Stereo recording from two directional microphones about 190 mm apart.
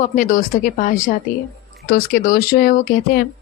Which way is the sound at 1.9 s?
55° left (ahead or behind).